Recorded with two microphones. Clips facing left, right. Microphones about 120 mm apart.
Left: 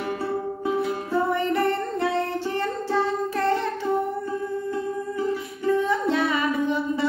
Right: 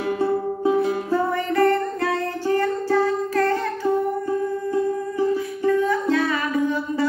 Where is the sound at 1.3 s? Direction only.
20° left (ahead or behind).